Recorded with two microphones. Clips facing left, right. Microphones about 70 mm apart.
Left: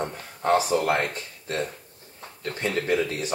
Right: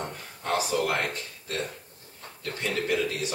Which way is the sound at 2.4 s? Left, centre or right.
Left.